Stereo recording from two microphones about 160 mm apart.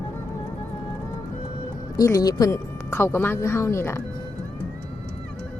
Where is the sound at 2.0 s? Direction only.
20° left (ahead or behind).